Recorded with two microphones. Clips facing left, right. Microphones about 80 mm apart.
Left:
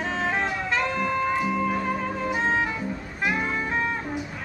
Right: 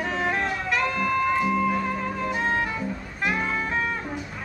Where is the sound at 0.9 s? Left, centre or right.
Centre.